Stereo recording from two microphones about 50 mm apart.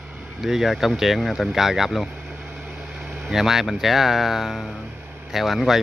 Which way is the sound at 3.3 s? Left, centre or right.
Centre.